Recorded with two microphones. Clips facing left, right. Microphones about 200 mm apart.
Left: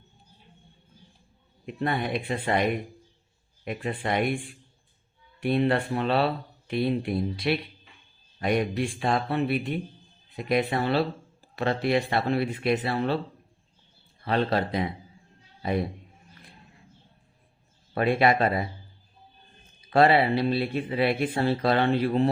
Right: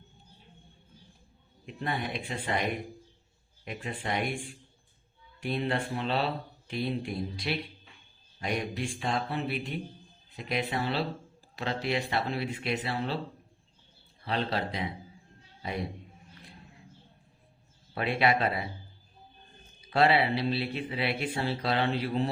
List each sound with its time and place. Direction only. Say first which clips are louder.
1.6 s speech: left 6 dB; 60° left (ahead or behind)
5.4 s speech: left 7 dB; 60° left (ahead or behind)
14.3 s speech: left 6 dB; 55° left (ahead or behind)
17.9 s speech: left 5 dB; 50° left (ahead or behind)
19.9 s speech: left 5 dB; 50° left (ahead or behind)